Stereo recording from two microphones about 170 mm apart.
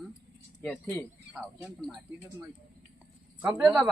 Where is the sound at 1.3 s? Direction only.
10° right (ahead or behind).